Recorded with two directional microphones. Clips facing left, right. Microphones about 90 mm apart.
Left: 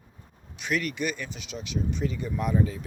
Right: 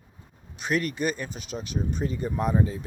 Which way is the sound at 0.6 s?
40° right (ahead or behind).